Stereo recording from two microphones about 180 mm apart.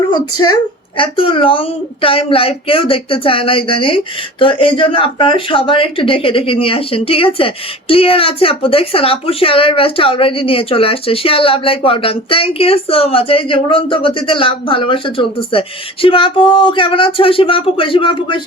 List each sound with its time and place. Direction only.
0.1 s speech: 25° left (ahead or behind)